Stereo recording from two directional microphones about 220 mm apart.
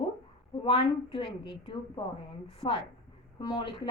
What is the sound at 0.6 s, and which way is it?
A woman's voice, 25° left (ahead or behind).